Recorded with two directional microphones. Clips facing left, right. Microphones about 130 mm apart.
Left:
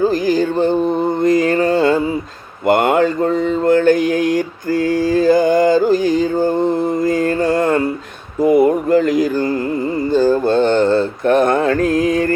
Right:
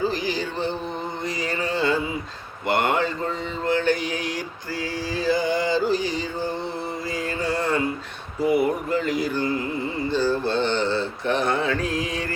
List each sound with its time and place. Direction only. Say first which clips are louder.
0.0 s music: left 10 dB; 45° left (ahead or behind)
1.2 s mantra: left 15 dB; 50° left (ahead or behind)
8.4 s a sound: left 9 dB; 45° left (ahead or behind)
10.1 s mantra: left 9 dB; 45° left (ahead or behind)